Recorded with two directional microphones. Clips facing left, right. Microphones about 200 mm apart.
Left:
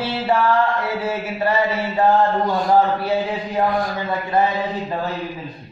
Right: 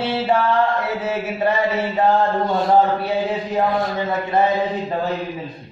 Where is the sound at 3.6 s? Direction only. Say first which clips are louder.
Left 1 dB; 25° right (ahead or behind).